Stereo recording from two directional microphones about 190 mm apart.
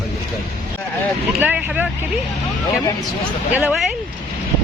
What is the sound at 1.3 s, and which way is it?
Speech, 10° right (ahead or behind).